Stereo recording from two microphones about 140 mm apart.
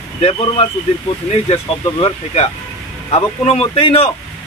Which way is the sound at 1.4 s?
45° left (ahead or behind).